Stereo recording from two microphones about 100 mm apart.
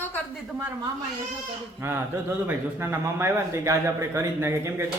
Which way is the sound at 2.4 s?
25° right (ahead or behind).